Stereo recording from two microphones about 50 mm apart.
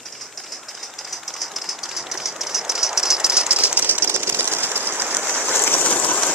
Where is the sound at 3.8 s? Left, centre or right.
Right.